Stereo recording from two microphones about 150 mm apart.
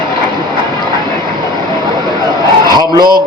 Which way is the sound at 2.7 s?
25° right (ahead or behind).